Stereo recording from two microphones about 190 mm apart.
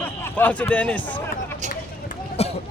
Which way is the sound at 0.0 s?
10° left (ahead or behind).